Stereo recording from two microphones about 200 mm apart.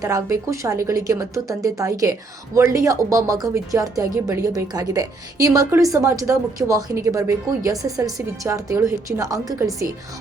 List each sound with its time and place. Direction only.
0.0 s speech: 15° right (ahead or behind)